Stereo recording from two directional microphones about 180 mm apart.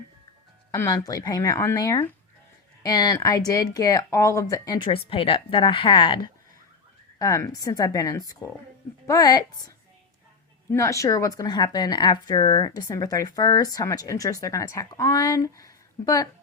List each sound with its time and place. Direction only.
0.7 s speech: 20° left (ahead or behind)